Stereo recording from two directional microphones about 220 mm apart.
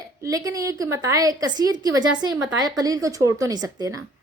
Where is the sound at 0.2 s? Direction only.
15° right (ahead or behind).